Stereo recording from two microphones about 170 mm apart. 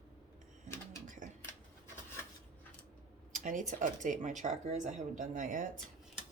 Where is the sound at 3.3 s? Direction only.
50° right (ahead or behind).